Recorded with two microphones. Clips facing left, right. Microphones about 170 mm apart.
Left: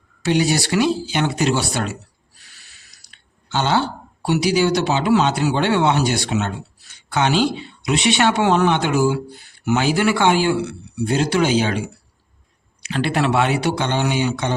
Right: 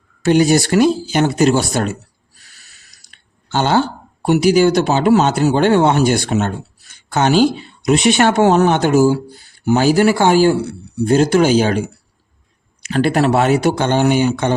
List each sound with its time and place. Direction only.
0.2 s speech: 45° right (ahead or behind)